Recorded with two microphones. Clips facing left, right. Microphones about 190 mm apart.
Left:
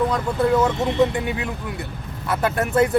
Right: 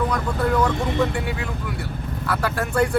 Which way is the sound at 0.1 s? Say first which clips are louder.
Left 3 dB; 25° left (ahead or behind).